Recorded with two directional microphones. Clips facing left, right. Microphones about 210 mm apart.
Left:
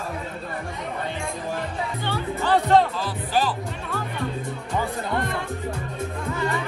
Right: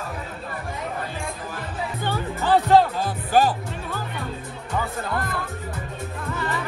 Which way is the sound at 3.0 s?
50° right (ahead or behind).